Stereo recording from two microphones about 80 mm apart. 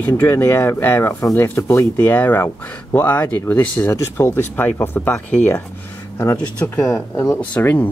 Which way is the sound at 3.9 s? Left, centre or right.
Left.